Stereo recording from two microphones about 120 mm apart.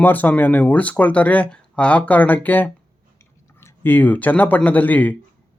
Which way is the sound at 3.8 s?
15° left (ahead or behind).